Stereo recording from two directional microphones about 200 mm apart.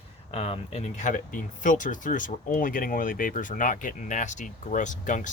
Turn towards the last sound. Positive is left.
turn(degrees=40)  # may be behind; listen again after turning